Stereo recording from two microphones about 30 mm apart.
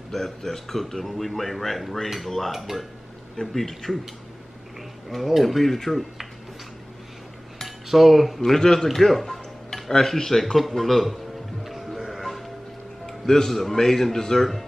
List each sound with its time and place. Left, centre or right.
0.1 s a man's voice: centre
3.3 s speech: centre
5.1 s a man's voice: centre
7.5 s cutlery: centre
8.5 s a man's voice: left
8.8 s a man's voice: centre
10.4 s a man's voice: centre
11.6 s music: centre
13.0 s a man's voice: centre